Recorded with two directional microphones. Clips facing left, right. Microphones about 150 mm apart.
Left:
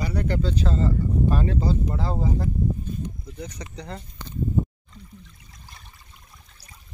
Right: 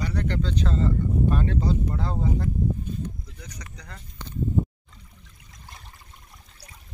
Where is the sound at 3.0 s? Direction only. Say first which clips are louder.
Left 3 dB; 25° left (ahead or behind).